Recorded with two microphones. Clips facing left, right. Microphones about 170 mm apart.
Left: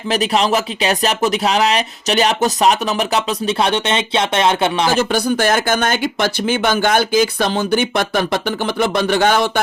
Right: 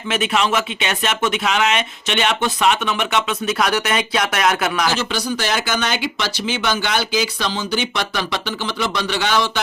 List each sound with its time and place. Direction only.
0.1 s speech: 35° left (ahead or behind)
4.9 s speech: 55° left (ahead or behind)